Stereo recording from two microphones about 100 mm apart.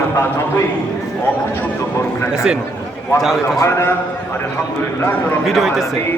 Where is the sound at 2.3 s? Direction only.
5° right (ahead or behind).